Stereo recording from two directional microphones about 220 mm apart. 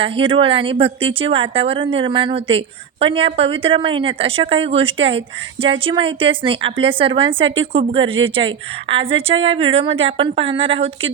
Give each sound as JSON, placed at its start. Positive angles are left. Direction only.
{"t": 0.0, "sound": "a woman's voice", "side_deg": -25}